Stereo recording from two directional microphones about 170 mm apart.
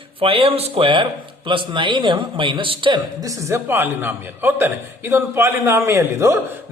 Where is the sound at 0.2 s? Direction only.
35° right (ahead or behind).